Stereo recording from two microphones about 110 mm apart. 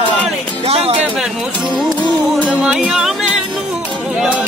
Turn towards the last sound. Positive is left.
turn(degrees=-5)  # may be behind; listen again after turning